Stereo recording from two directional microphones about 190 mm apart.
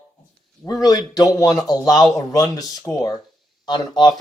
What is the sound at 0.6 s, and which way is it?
A man's voice, 20° left (ahead or behind).